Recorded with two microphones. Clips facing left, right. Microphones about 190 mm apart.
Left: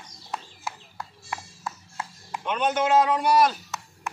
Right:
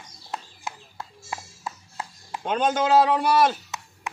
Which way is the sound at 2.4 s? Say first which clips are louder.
Right 2 dB; 35° right (ahead or behind).